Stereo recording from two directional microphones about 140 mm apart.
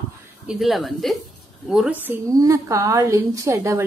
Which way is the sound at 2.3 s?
25° right (ahead or behind).